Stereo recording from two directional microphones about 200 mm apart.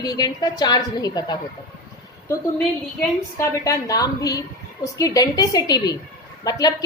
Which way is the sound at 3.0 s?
15° left (ahead or behind).